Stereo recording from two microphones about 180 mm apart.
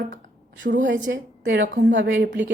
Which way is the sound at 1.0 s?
90° right.